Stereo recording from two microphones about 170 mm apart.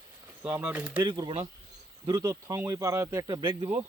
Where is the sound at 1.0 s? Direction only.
25° right (ahead or behind).